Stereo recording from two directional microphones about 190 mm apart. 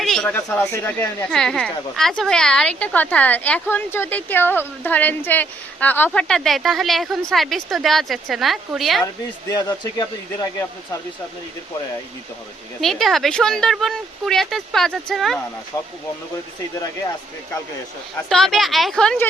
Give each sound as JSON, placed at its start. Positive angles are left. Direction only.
{"t": 0.0, "sound": "speech", "side_deg": 0}
{"t": 9.5, "sound": "speech", "side_deg": 20}
{"t": 12.8, "sound": "speech", "side_deg": 0}
{"t": 15.7, "sound": "speech", "side_deg": 15}
{"t": 18.3, "sound": "speech", "side_deg": 0}